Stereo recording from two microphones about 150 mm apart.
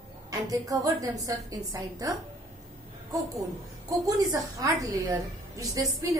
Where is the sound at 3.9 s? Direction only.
20° right (ahead or behind).